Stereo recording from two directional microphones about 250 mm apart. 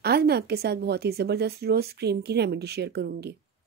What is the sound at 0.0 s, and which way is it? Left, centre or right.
Speech, right.